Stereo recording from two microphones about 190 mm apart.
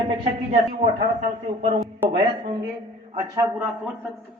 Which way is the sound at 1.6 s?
35° right (ahead or behind).